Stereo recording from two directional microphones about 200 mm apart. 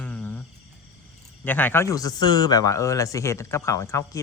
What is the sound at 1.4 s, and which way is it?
A man's voice, 10° left (ahead or behind).